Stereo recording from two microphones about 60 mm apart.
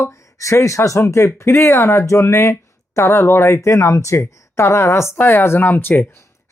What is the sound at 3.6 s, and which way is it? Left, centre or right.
Speech, left.